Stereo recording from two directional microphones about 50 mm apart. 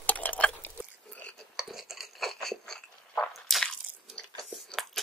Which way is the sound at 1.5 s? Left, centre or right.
Centre.